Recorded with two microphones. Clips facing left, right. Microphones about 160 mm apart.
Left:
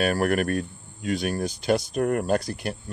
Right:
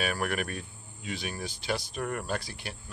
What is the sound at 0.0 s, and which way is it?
Speech, 45° left (ahead or behind).